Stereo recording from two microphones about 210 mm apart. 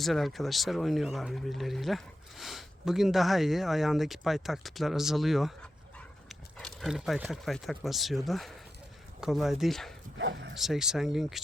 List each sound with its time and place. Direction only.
0.0 s speech: centre (ahead or behind)
10.2 s speech: 60° right (ahead or behind)
10.5 s speech: centre (ahead or behind)